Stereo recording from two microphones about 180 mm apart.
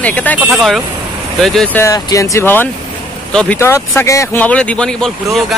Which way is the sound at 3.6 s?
15° left (ahead or behind).